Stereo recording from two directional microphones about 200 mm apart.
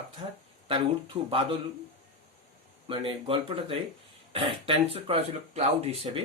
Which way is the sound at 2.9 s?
25° right (ahead or behind).